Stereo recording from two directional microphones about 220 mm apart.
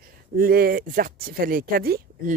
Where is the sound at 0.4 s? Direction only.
40° right (ahead or behind).